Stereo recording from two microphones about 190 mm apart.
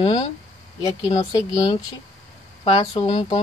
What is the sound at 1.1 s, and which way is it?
Speech, 20° left (ahead or behind).